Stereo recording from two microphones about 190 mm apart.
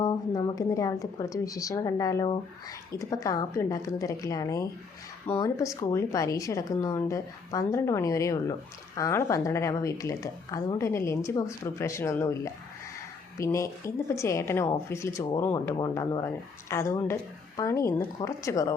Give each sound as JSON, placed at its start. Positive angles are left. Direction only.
{"t": 0.0, "sound": "speech", "side_deg": 20}